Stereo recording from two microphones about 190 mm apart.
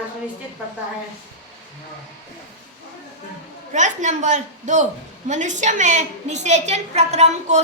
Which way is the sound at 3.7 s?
40° right (ahead or behind).